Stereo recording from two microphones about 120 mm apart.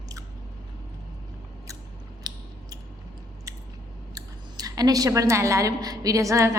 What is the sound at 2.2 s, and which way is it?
Scissors, 30° right (ahead or behind).